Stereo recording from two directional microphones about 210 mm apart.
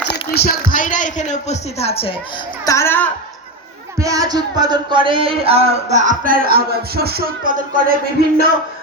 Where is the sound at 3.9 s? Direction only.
15° right (ahead or behind); by 8.0 s 40° right (ahead or behind).